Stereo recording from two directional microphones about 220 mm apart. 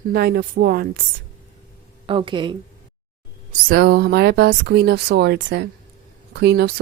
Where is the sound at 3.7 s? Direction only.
45° right (ahead or behind).